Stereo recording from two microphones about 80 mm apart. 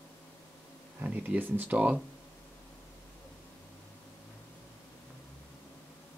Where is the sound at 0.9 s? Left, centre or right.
Centre.